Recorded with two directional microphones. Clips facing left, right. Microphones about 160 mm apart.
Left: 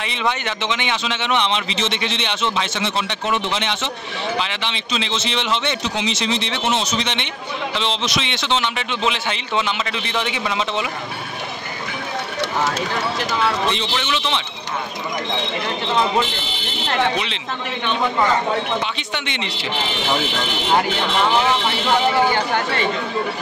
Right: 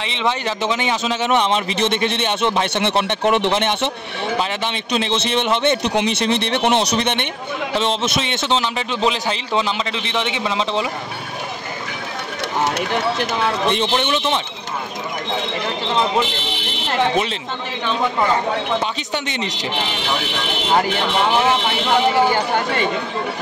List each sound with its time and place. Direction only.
0.0 s a man's voice: 25° right (ahead or behind)
13.7 s speech: 50° right (ahead or behind)
19.1 s a man's voice: 40° right (ahead or behind)